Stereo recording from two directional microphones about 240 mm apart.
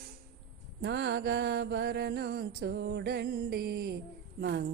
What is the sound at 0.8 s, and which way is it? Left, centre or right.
Mantra, right.